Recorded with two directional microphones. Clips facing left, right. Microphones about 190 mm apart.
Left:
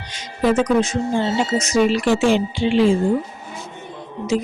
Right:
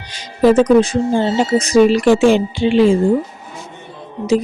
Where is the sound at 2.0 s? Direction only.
50° right (ahead or behind).